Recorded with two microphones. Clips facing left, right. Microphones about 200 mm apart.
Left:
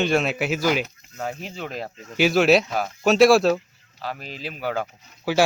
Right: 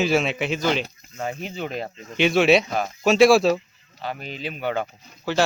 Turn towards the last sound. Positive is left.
turn(degrees=-35)  # may be behind; listen again after turning